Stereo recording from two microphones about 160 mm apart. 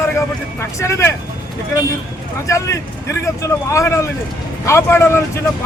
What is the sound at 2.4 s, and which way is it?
Speech, 20° left (ahead or behind).